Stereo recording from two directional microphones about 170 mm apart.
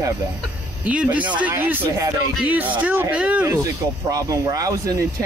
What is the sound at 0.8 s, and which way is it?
Speech, 10° right (ahead or behind).